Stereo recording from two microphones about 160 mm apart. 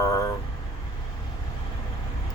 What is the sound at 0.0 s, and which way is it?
Vehicle, 20° left (ahead or behind).